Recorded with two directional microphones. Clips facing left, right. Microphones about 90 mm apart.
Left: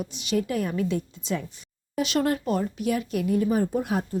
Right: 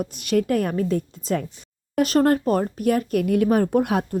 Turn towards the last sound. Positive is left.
turn(degrees=-70)  # may be behind; listen again after turning